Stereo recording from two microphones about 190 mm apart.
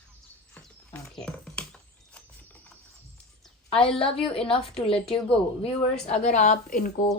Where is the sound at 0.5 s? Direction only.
10° left (ahead or behind).